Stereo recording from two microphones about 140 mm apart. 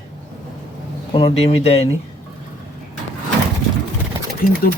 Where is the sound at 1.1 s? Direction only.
40° left (ahead or behind).